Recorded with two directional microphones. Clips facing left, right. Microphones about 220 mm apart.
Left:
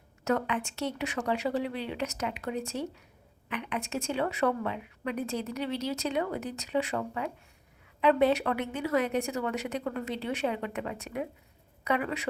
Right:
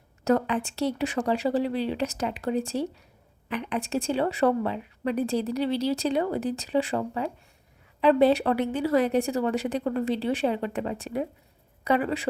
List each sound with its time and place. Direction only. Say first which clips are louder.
0.3 s a woman's voice: right 5 dB; 35° right (ahead or behind)